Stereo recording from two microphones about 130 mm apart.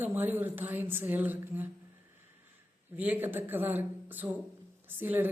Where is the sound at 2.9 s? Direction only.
15° right (ahead or behind).